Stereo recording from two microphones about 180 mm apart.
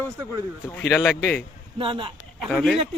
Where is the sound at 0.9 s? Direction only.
10° left (ahead or behind).